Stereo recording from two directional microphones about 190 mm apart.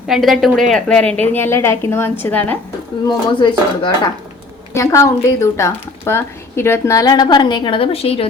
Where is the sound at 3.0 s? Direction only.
25° left (ahead or behind).